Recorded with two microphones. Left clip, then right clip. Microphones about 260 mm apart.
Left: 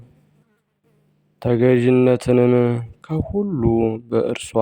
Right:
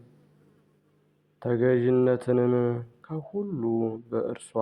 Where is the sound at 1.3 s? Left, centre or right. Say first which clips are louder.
Left 7 dB; left.